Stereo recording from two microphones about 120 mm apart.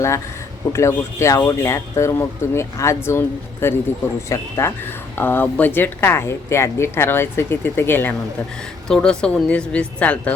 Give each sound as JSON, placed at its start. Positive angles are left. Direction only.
{"t": 0.7, "sound": "speech", "side_deg": 25}
{"t": 8.9, "sound": "speech", "side_deg": 5}